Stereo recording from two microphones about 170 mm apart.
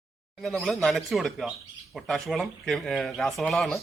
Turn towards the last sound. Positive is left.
turn(degrees=0)  # may be behind; listen again after turning